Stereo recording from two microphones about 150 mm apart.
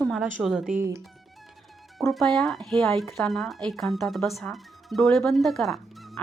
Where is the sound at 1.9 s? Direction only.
Centre (ahead or behind).